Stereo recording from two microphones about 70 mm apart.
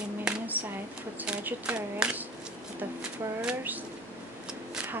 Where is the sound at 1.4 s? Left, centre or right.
Right.